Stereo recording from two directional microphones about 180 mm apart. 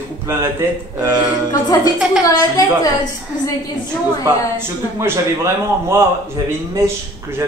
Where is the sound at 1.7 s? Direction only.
20° left (ahead or behind).